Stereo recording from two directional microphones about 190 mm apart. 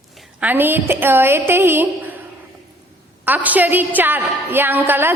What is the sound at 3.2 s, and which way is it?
A woman's voice, 10° right (ahead or behind).